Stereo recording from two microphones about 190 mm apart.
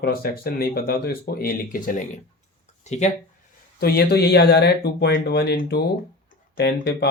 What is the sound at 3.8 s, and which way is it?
Speech, 55° left (ahead or behind).